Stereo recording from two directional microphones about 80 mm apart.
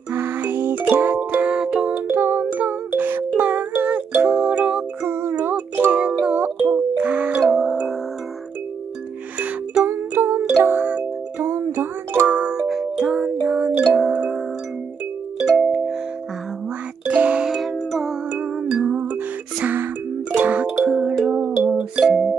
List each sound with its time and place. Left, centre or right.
0.1 s music: right
2.0 s music: right
5.0 s music: right; by 7.9 s centre
9.8 s music: right
11.3 s music: right
12.3 s music: centre
15.5 s music: centre
17.1 s music: centre
17.6 s music: centre